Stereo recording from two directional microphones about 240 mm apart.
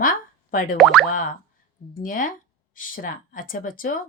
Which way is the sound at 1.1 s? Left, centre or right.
Left.